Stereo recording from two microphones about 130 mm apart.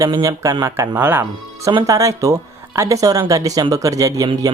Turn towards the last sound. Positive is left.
turn(degrees=-25)  # may be behind; listen again after turning